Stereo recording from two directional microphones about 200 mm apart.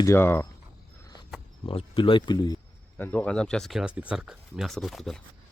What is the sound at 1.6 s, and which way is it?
Speech, 25° left (ahead or behind).